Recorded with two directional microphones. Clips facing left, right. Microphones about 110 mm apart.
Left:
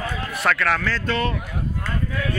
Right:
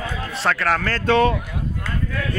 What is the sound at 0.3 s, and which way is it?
Speech, 30° right (ahead or behind).